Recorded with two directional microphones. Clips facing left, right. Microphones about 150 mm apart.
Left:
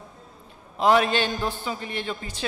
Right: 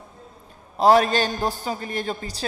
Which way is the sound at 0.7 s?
40° right (ahead or behind).